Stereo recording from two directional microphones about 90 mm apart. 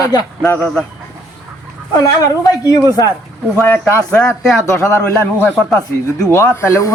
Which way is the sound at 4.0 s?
10° left (ahead or behind).